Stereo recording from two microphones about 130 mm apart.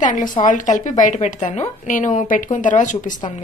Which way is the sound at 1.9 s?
90° left.